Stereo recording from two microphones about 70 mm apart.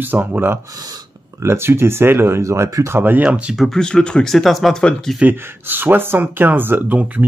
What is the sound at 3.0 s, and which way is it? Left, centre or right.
Speech, right.